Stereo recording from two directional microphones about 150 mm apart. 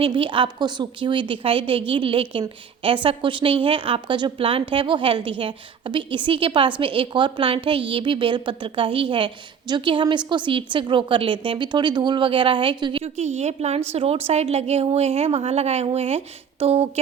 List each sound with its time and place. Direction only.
0.0 s a woman's voice: 35° right (ahead or behind)
13.1 s a woman's voice: 50° right (ahead or behind)